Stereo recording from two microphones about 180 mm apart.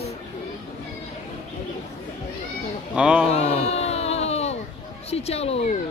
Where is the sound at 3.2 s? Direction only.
35° left (ahead or behind).